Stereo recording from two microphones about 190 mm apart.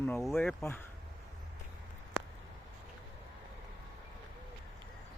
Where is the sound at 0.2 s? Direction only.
Centre (ahead or behind).